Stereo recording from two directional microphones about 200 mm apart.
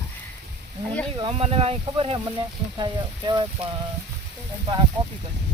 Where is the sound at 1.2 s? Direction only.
25° right (ahead or behind).